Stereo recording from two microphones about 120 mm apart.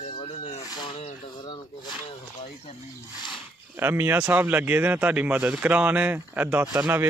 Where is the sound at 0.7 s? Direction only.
35° left (ahead or behind).